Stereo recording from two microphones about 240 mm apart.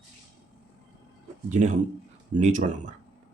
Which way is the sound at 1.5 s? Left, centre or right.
Right.